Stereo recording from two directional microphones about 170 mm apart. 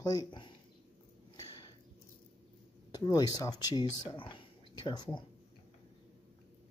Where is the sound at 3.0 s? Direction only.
20° left (ahead or behind).